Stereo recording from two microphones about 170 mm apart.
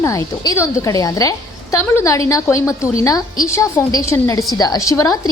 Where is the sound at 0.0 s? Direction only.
20° left (ahead or behind).